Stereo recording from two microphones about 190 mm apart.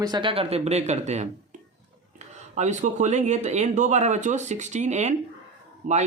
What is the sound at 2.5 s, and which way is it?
Speech, 40° right (ahead or behind).